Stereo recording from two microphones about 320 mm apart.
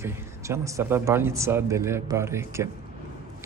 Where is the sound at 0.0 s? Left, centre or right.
Centre.